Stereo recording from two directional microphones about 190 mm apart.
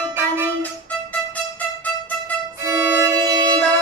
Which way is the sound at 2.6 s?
15° right (ahead or behind).